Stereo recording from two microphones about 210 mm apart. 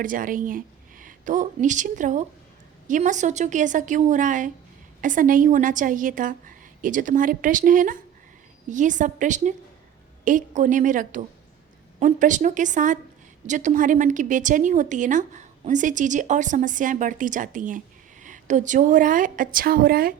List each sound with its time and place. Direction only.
0.0 s a woman's voice: 40° right (ahead or behind)